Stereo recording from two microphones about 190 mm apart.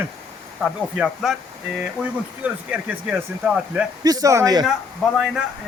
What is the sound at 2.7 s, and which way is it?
A man's voice, 5° right (ahead or behind).